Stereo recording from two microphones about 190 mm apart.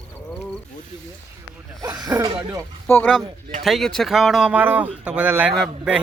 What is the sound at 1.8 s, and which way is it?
Speech, 20° right (ahead or behind).